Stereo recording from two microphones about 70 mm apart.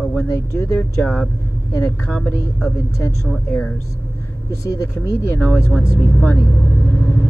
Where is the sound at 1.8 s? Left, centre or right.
Left.